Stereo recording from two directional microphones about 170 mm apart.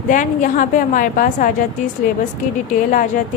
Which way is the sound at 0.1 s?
50° left (ahead or behind).